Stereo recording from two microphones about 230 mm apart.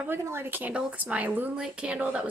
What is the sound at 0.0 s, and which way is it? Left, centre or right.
A woman's voice, centre.